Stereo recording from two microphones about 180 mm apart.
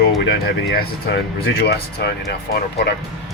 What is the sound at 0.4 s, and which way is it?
Speech, 60° left (ahead or behind).